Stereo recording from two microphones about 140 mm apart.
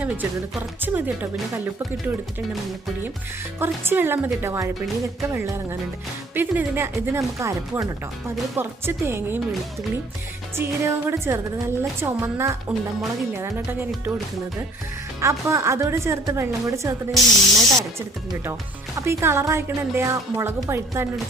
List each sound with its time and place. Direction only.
0.0 s music: 10° right (ahead or behind)
0.8 s a woman's voice: 15° right (ahead or behind)
3.6 s a woman's voice: 15° right (ahead or behind)
6.3 s a woman's voice: 10° right (ahead or behind)
10.5 s a woman's voice: 15° right (ahead or behind)
15.2 s a woman's voice: 20° right (ahead or behind)
17.1 s speech: centre (ahead or behind)
18.9 s a woman's voice: 20° right (ahead or behind)